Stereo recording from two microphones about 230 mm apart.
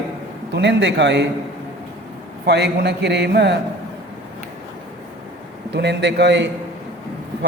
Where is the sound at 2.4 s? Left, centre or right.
Right.